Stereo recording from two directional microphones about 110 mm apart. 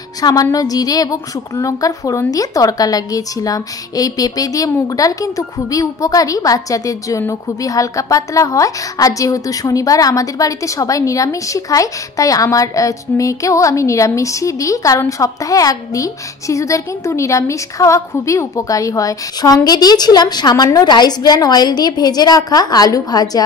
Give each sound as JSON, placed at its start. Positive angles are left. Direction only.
{"t": 0.2, "sound": "a woman's voice", "side_deg": 35}